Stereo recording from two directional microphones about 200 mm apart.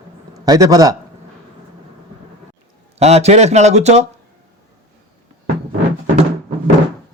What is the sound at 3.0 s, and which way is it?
Speech, 30° right (ahead or behind).